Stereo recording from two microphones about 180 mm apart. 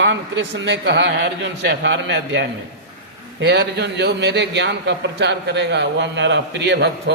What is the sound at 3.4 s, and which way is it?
A man's voice, 70° right (ahead or behind).